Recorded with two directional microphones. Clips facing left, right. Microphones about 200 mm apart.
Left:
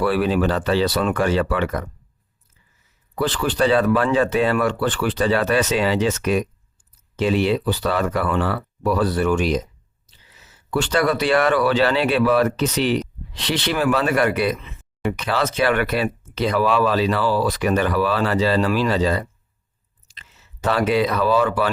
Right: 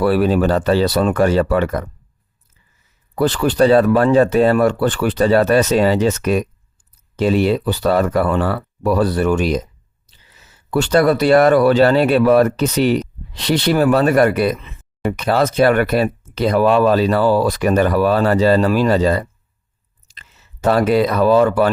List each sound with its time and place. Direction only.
0.0 s speech: 40° right (ahead or behind)
3.2 s speech: 40° right (ahead or behind)
10.7 s speech: 40° right (ahead or behind)